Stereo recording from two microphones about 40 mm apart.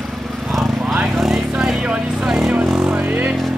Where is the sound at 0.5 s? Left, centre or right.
Centre; by 2.3 s right.